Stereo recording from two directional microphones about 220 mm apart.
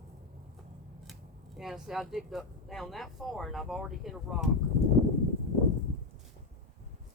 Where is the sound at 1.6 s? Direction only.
Centre (ahead or behind).